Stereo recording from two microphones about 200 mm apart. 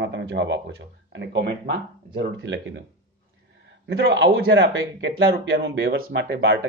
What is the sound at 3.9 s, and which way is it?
Speech, 65° right (ahead or behind).